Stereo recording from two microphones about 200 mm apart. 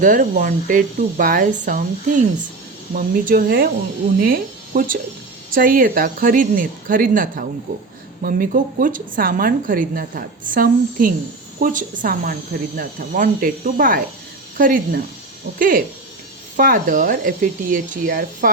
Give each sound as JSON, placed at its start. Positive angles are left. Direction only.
{"t": 0.0, "sound": "a woman's voice", "side_deg": -40}